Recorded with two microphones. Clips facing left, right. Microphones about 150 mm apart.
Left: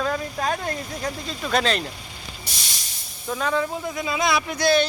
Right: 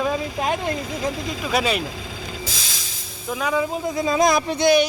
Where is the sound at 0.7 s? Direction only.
90° right.